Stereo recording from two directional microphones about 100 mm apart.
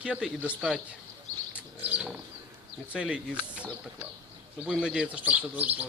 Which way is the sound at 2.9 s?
10° right (ahead or behind).